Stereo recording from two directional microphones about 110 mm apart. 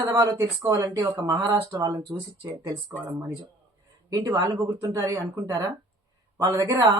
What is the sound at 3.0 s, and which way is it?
Speech, 15° right (ahead or behind).